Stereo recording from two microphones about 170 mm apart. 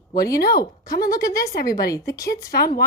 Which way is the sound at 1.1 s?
20° left (ahead or behind).